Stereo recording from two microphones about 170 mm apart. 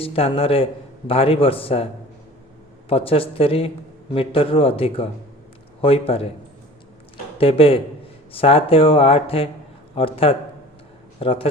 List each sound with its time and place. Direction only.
0.0 s a man's voice: 35° left (ahead or behind)
2.9 s a man's voice: 35° left (ahead or behind)
7.3 s a man's voice: 35° left (ahead or behind)